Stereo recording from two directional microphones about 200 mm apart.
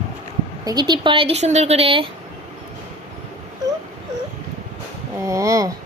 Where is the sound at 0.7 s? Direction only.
20° right (ahead or behind).